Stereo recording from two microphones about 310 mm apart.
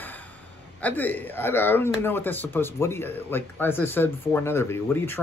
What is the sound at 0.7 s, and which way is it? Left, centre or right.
Speech, centre.